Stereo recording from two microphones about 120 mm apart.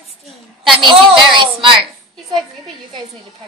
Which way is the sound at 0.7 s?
40° right (ahead or behind).